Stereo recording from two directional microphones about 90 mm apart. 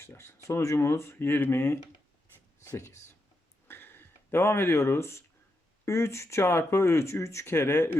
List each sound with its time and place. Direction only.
0.0 s speech: 25° left (ahead or behind)
3.7 s a sound: 25° left (ahead or behind)
5.8 s speech: 30° left (ahead or behind)